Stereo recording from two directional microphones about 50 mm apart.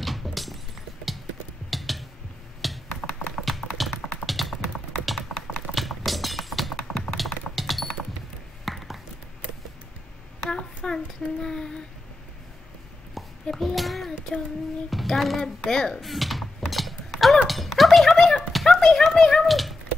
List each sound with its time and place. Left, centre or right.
0.0 s shatter: centre
1.7 s mechanisms: centre
2.6 s computer keyboard: centre
3.4 s tap: centre
4.3 s typing: centre
7.2 s a sound: centre
10.5 s a sound: centre
13.1 s babbling: centre
14.9 s a sound: centre